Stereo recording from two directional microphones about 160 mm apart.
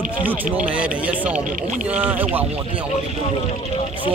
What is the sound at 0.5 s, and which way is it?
Speech, 10° right (ahead or behind).